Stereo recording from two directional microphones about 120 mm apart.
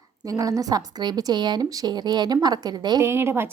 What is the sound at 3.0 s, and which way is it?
Speech, 20° right (ahead or behind).